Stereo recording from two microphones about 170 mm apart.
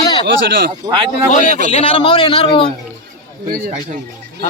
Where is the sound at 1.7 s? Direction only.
35° left (ahead or behind).